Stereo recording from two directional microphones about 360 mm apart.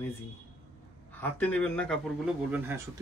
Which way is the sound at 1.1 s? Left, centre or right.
Centre.